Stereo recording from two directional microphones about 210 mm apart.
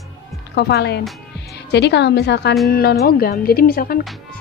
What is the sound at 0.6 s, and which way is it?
A woman's voice, 50° left (ahead or behind).